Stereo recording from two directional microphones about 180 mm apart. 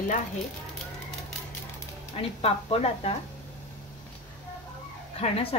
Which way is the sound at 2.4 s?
35° left (ahead or behind).